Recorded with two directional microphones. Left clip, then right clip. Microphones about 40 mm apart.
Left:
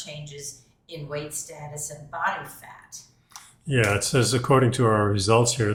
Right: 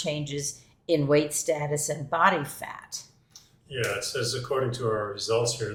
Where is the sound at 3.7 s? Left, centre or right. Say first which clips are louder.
Left 7 dB; left.